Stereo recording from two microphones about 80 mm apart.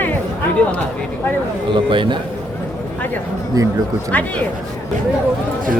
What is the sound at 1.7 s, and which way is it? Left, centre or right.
Speech, right.